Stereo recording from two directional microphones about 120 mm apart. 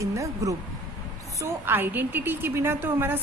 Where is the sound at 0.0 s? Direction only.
25° right (ahead or behind).